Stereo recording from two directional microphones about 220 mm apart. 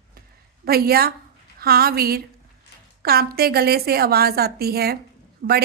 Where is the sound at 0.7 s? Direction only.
45° right (ahead or behind).